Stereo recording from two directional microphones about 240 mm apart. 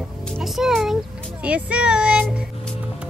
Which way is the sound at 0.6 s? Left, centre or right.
Centre.